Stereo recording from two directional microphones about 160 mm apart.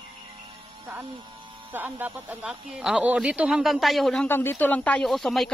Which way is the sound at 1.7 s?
10° right (ahead or behind).